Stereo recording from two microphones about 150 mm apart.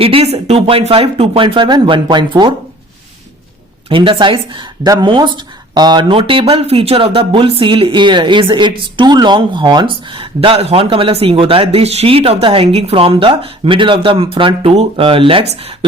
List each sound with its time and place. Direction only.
0.0 s speech: 40° right (ahead or behind)
3.8 s speech: 35° right (ahead or behind)